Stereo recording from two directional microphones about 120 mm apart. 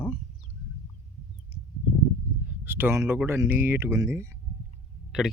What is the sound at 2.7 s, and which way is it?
Speech, 15° right (ahead or behind).